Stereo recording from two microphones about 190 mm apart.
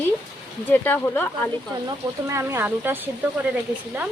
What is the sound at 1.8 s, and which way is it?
Speech, 15° right (ahead or behind).